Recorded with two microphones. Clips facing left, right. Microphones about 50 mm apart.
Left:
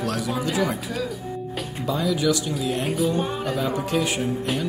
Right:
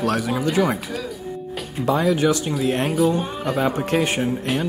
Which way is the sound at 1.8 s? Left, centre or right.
Right.